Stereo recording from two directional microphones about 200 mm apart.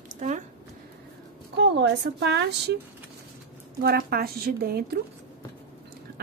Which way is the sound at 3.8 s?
50° right (ahead or behind).